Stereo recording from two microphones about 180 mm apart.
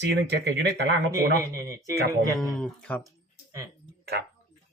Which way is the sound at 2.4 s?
Centre (ahead or behind).